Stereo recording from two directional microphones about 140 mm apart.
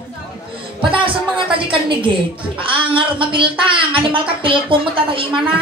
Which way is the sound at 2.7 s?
40° right (ahead or behind).